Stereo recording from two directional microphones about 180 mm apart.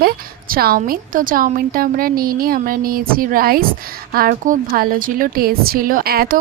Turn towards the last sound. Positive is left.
turn(degrees=-55)  # may be behind; listen again after turning